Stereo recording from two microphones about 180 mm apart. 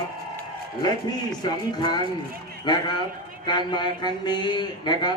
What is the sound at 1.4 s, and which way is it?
Speech, 25° left (ahead or behind).